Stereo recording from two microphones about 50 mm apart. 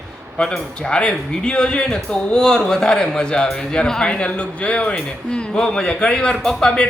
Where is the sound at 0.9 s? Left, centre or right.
Centre.